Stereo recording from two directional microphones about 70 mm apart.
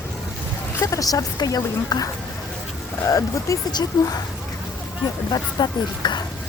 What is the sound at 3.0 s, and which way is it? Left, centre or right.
Speech, left.